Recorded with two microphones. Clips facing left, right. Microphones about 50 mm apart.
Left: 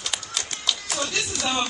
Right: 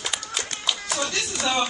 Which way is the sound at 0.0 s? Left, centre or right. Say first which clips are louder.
Right 1 dB; centre.